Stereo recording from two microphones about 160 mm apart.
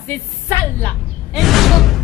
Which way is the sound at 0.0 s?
15° left (ahead or behind).